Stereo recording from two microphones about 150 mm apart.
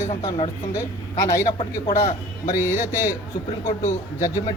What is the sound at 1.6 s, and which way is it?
Speech, 45° left (ahead or behind).